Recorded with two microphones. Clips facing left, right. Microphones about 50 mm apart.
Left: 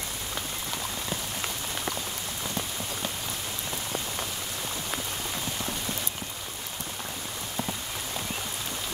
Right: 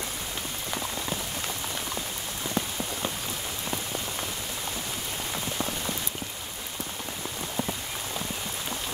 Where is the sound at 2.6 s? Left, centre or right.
Right.